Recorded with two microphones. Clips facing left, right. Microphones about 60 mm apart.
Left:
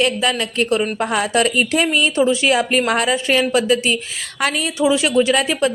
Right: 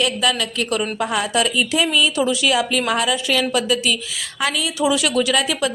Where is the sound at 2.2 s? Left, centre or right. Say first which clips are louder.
Left 3 dB; left.